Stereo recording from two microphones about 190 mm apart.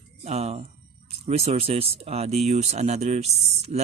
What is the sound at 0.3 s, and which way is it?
Speech, 35° right (ahead or behind).